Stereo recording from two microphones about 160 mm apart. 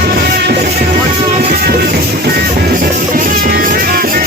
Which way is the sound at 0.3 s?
80° right.